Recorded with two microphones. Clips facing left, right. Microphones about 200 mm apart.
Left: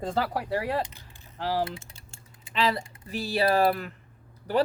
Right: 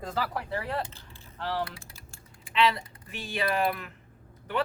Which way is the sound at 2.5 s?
35° left (ahead or behind).